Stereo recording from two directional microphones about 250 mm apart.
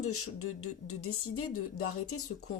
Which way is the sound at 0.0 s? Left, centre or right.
Left.